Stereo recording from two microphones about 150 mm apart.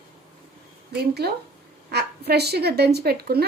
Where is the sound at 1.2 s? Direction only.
90° right.